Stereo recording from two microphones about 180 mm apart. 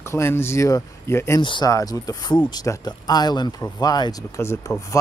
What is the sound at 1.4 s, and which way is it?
Speech, 25° left (ahead or behind).